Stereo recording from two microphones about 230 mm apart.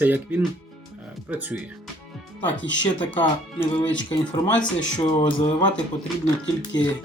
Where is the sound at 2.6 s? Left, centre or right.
Left.